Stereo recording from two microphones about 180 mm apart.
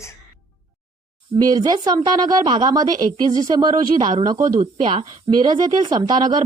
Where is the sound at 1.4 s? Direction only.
20° right (ahead or behind).